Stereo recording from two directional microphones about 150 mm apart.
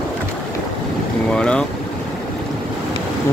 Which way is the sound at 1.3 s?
5° left (ahead or behind).